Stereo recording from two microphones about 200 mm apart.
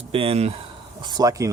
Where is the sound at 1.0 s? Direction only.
20° right (ahead or behind).